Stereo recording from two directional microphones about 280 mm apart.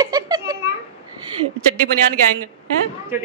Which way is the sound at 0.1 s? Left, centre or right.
Centre.